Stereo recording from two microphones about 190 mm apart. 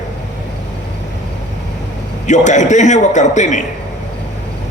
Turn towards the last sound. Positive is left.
turn(degrees=40)  # may be behind; listen again after turning